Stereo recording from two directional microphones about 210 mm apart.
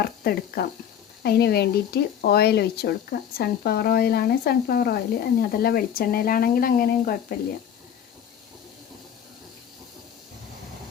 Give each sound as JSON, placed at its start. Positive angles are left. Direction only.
{"t": 0.0, "sound": "speech", "side_deg": 45}